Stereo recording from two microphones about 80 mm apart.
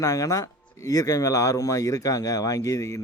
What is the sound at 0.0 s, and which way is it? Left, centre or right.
Speech, left.